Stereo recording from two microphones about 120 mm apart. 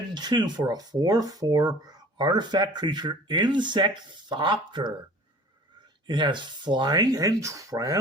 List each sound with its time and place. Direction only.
0.1 s speech: 35° right (ahead or behind)
6.1 s speech: 40° right (ahead or behind)